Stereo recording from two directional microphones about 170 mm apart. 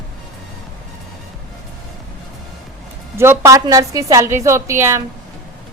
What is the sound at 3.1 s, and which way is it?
A woman's voice, 15° right (ahead or behind).